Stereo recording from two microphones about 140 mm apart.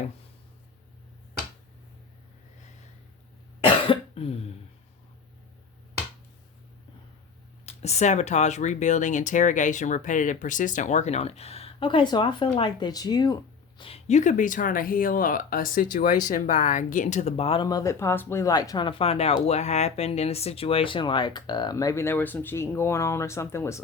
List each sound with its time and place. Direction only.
3.6 s cough: 40° left (ahead or behind)
7.6 s speech: 50° left (ahead or behind); by 13.8 s 30° left (ahead or behind)
13.8 s speech: 50° left (ahead or behind); by 16.1 s 75° left (ahead or behind)
16.2 s speech: 65° left (ahead or behind); by 17.6 s 45° left (ahead or behind)
17.6 s speech: 30° left (ahead or behind)